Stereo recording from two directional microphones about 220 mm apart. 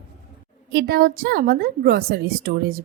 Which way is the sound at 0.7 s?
45° right (ahead or behind).